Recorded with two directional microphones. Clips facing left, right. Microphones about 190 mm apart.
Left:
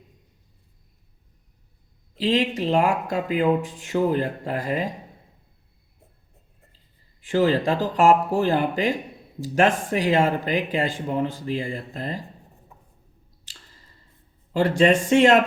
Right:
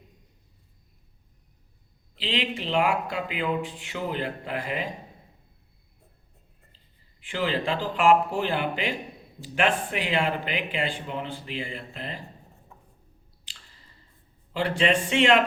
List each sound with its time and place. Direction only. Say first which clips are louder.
2.1 s speech: left 8 dB; 40° left (ahead or behind)
7.2 s speech: left 8 dB; 45° left (ahead or behind)
13.5 s squish: left 3 dB; 45° left (ahead or behind)
14.5 s speech: left 6 dB; 45° left (ahead or behind)